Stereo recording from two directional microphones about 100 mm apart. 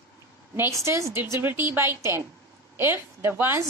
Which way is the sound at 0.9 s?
30° right (ahead or behind).